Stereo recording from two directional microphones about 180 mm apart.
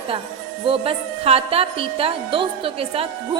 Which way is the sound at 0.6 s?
30° right (ahead or behind).